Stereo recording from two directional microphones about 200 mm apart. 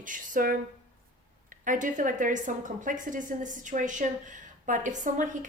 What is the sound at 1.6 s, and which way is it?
A woman's voice, 40° right (ahead or behind).